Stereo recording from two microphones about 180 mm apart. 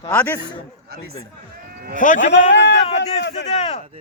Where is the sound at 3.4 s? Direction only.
35° left (ahead or behind).